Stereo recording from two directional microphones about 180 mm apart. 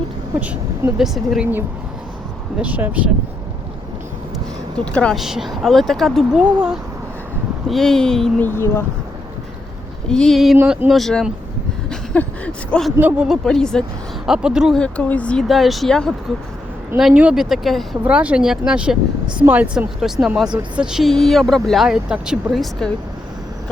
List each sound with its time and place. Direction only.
0.3 s speech: 10° right (ahead or behind)
4.9 s speech: 5° left (ahead or behind)
10.1 s speech: 5° left (ahead or behind)
11.9 s a sound: 5° left (ahead or behind)
13.0 s speech: 10° right (ahead or behind)